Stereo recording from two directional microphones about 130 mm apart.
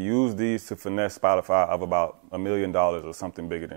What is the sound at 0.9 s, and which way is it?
Speech, 15° right (ahead or behind).